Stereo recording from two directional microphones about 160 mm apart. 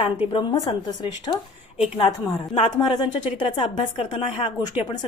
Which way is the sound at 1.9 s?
35° left (ahead or behind).